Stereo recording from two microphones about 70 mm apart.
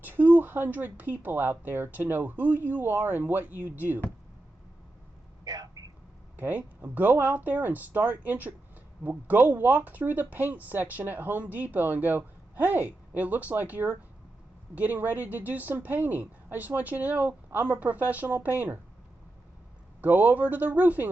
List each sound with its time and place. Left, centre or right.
0.0 s speech: right
5.5 s a sound: right
6.3 s speech: right
20.0 s speech: right